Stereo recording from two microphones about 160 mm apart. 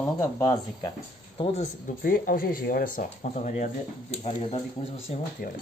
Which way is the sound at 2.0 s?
65° left (ahead or behind).